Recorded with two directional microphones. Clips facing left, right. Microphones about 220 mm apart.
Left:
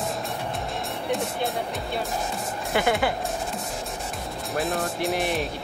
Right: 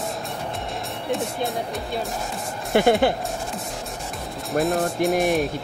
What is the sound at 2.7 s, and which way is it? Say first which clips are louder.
Speech: right 6 dB; 40° right (ahead or behind).